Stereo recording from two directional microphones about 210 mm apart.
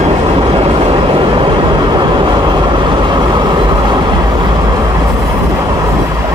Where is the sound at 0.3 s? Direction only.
25° right (ahead or behind).